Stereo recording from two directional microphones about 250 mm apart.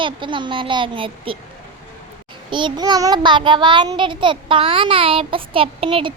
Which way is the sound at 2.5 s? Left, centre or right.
Centre.